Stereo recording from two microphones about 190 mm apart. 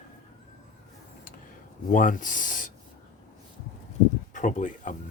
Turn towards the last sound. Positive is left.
turn(degrees=40)  # may be behind; listen again after turning